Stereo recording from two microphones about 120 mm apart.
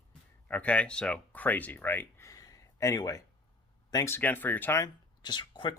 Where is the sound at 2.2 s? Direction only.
30° left (ahead or behind).